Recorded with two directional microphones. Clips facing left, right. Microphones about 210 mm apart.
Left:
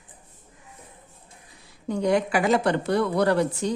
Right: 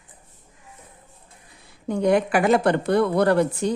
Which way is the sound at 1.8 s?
55° right (ahead or behind).